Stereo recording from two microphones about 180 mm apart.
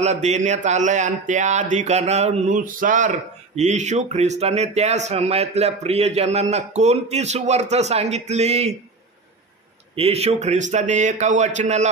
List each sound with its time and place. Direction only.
0.0 s speech: 40° right (ahead or behind)
9.9 s speech: 35° right (ahead or behind)